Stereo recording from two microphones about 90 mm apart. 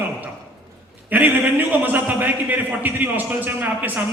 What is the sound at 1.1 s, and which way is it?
A man's voice, 20° right (ahead or behind).